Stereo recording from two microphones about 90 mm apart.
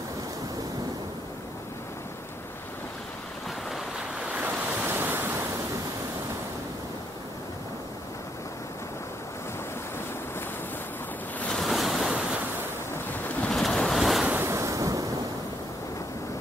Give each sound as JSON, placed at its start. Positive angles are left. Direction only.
{"t": 4.3, "sound": "waves", "side_deg": -15}
{"t": 11.3, "sound": "waves", "side_deg": 5}
{"t": 13.5, "sound": "waves", "side_deg": 5}
{"t": 14.4, "sound": "waves", "side_deg": -30}